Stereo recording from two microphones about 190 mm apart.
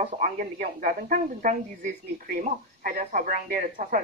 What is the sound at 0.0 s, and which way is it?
A woman's voice, 40° right (ahead or behind).